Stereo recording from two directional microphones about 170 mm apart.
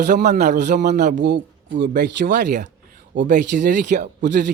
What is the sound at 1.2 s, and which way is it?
Speech, 90° right.